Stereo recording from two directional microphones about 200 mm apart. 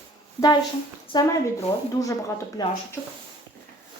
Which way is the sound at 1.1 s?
20° left (ahead or behind).